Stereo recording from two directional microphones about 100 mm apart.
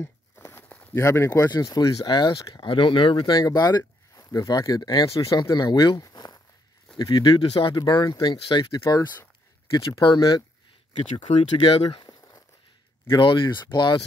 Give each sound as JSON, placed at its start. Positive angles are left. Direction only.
{"t": 0.5, "sound": "a sound", "side_deg": 20}
{"t": 0.9, "sound": "speech", "side_deg": 25}
{"t": 1.3, "sound": "speech", "side_deg": 40}
{"t": 5.9, "sound": "a sound", "side_deg": 40}
{"t": 7.0, "sound": "speech", "side_deg": 50}
{"t": 10.1, "sound": "speech", "side_deg": 40}
{"t": 11.6, "sound": "speech", "side_deg": 65}
{"t": 12.2, "sound": "a sound", "side_deg": 30}
{"t": 13.1, "sound": "speech", "side_deg": 55}